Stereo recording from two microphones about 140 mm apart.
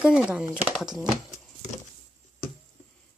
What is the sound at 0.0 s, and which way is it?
Speech, 5° right (ahead or behind).